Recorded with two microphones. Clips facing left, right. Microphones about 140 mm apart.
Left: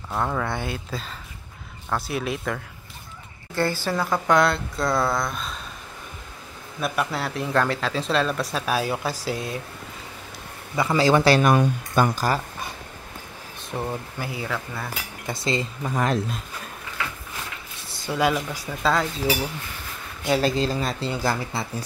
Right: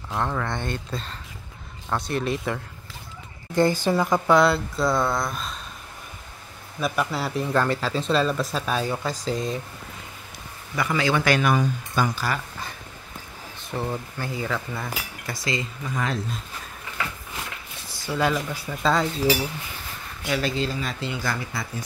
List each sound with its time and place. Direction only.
0.1 s speech: 5° left (ahead or behind)
3.5 s a woman's voice: 15° right (ahead or behind)
4.3 s speech: centre (ahead or behind)
6.8 s speech: centre (ahead or behind)
10.8 s speech: 35° left (ahead or behind)
11.5 s speech: 55° left (ahead or behind)
13.7 s speech: 10° left (ahead or behind)
15.2 s speech: 25° left (ahead or behind)
15.8 s speech: 45° left (ahead or behind)
18.0 s speech: 15° left (ahead or behind)
18.8 s speech: centre (ahead or behind)
20.2 s speech: 35° left (ahead or behind)